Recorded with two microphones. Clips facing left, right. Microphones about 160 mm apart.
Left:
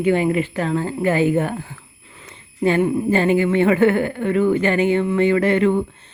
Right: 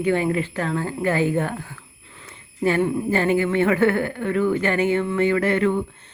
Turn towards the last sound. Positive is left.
turn(degrees=25)  # may be behind; listen again after turning